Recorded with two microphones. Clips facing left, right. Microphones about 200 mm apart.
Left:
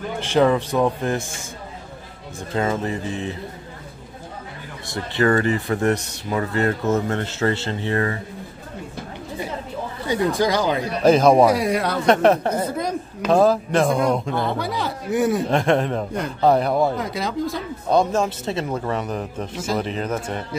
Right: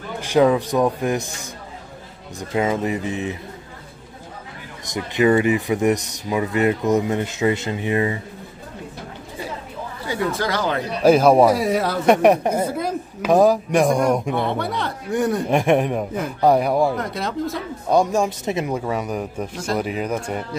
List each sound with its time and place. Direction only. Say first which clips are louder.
0.3 s speech: right 2 dB; 10° right (ahead or behind)
2.5 s speech: right 2 dB; 15° right (ahead or behind)
4.9 s speech: right 2 dB; 15° right (ahead or behind)
10.0 s speech: left 3 dB; 15° left (ahead or behind)
11.0 s speech: right 1 dB; 10° right (ahead or behind)
14.3 s speech: right 1 dB; centre (ahead or behind)
15.5 s speech: right 1 dB; 15° right (ahead or behind)
16.9 s speech: even; centre (ahead or behind)
17.8 s speech: right 1 dB; 10° right (ahead or behind)
19.5 s speech: left 1 dB; centre (ahead or behind)
19.8 s speech: right 1 dB; 10° right (ahead or behind)